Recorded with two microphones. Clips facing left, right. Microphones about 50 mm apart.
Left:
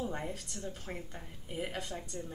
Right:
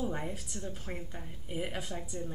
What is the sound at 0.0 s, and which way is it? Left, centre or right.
A woman's voice, centre.